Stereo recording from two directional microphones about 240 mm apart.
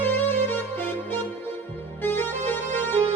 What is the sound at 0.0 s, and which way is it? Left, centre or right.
Music, centre.